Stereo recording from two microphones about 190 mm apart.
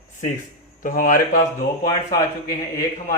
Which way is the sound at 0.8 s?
45° left (ahead or behind).